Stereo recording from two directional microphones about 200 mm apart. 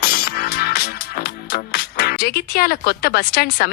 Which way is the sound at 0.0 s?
50° left (ahead or behind).